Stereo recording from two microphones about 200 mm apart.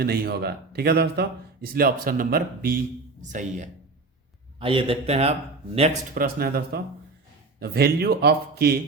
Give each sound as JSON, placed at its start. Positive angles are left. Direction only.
{"t": 0.0, "sound": "a man's voice", "side_deg": -50}
{"t": 4.6, "sound": "a man's voice", "side_deg": -25}
{"t": 6.1, "sound": "a man's voice", "side_deg": -50}